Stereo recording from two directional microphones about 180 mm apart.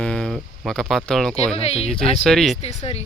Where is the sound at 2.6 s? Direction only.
35° left (ahead or behind).